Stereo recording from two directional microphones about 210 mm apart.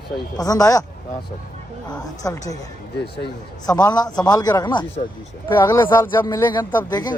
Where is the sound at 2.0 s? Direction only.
15° left (ahead or behind).